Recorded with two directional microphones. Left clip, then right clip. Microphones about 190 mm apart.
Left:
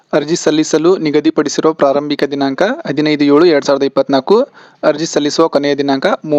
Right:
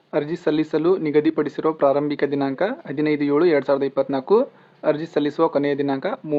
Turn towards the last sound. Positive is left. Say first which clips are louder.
# left 10 dB
turn(degrees=40)  # may be behind; listen again after turning